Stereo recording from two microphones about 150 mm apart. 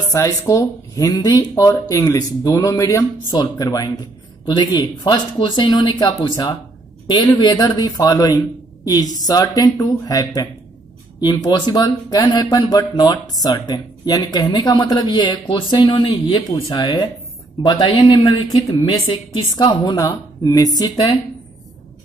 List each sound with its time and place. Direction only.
0.1 s a woman's voice: 20° left (ahead or behind)